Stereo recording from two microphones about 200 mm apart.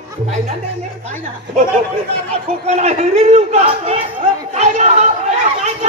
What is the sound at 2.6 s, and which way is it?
Speech, 35° right (ahead or behind).